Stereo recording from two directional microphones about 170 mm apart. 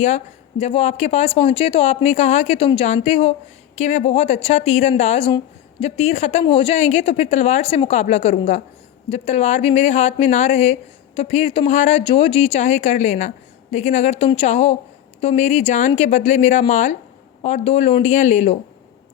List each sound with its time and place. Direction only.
0.6 s speech: 40° left (ahead or behind)